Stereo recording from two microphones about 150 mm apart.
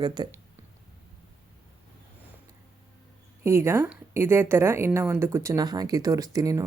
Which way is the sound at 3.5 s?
15° right (ahead or behind).